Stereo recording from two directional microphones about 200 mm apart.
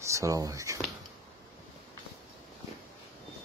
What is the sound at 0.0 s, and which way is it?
Speech, 15° right (ahead or behind).